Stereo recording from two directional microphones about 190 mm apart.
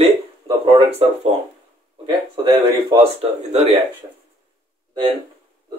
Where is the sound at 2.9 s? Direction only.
35° right (ahead or behind).